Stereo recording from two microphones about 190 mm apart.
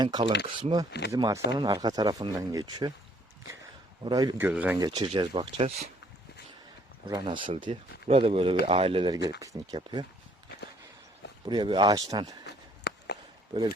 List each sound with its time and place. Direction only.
0.0 s speech: 20° right (ahead or behind)
0.9 s speech: 60° left (ahead or behind)
1.1 s speech: 15° right (ahead or behind)
4.0 s speech: 20° right (ahead or behind)
4.4 s speech: 10° right (ahead or behind)
4.8 s speech: 25° right (ahead or behind)
7.0 s speech: 25° right (ahead or behind)
11.4 s speech: 25° right (ahead or behind)
12.9 s a sound: 65° left (ahead or behind)
13.5 s speech: 25° right (ahead or behind)